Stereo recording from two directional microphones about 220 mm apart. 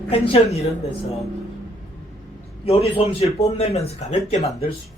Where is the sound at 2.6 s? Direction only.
25° left (ahead or behind).